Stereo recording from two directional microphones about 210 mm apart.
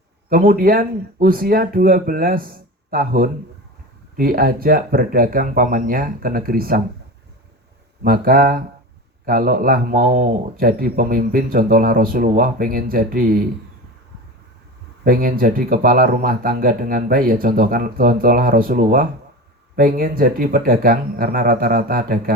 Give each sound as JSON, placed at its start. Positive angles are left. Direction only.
{"t": 0.3, "sound": "speech", "side_deg": -45}
{"t": 8.0, "sound": "speech", "side_deg": -45}
{"t": 15.0, "sound": "speech", "side_deg": -45}